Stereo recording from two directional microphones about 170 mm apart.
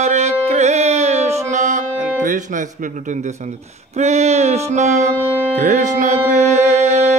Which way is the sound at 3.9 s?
40° right (ahead or behind).